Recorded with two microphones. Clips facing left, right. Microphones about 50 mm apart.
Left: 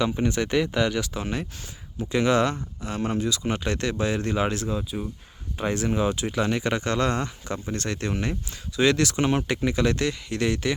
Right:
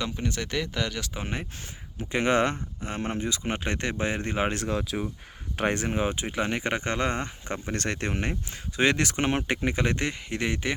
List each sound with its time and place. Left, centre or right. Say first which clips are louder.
0.0 s speech: left 7 dB; centre
1.1 s speech: left 4 dB; right
4.7 s speech: even; right
5.7 s speech: left 3 dB; right
7.7 s speech: left 1 dB; right